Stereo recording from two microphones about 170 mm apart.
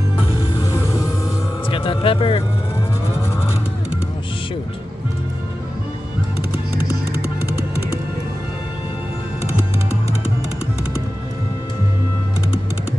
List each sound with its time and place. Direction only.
1.7 s music: 30° left (ahead or behind)